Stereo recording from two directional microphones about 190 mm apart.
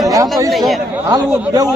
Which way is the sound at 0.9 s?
10° right (ahead or behind).